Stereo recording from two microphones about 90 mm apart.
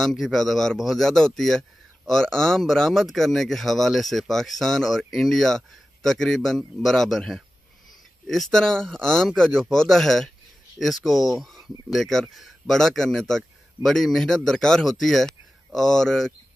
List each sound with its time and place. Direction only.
0.0 s speech: centre (ahead or behind)